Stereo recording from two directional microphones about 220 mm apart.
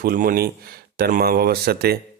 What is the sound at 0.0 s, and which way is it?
Speech, 40° right (ahead or behind).